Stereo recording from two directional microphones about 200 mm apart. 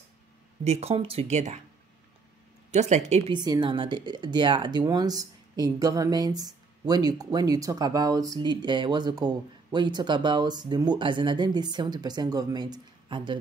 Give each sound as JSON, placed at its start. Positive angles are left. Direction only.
{"t": 0.7, "sound": "speech", "side_deg": -30}
{"t": 2.7, "sound": "speech", "side_deg": -35}
{"t": 3.3, "sound": "speech", "side_deg": -20}